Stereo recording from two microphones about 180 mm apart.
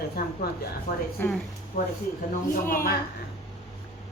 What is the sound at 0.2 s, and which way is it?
Speech, 60° left (ahead or behind).